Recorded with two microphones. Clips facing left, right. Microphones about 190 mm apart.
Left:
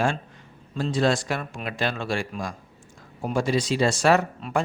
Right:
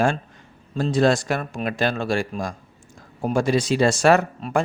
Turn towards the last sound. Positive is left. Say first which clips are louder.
# right 3 dB
turn(degrees=-50)  # may be behind; listen again after turning